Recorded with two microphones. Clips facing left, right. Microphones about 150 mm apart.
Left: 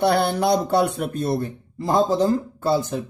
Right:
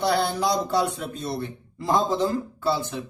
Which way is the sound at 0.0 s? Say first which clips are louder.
Left 4 dB; 55° left (ahead or behind).